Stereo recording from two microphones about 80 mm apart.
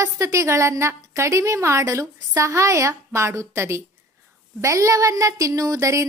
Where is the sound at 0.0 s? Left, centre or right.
Right.